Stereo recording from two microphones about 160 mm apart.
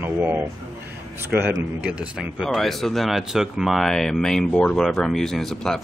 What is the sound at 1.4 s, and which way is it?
Speech, 10° right (ahead or behind).